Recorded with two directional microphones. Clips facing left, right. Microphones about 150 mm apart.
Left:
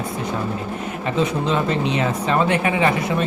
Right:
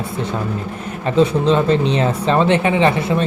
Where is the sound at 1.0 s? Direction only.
30° right (ahead or behind).